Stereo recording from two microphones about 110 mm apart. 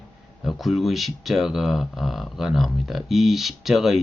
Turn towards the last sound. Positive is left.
turn(degrees=-5)  # may be behind; listen again after turning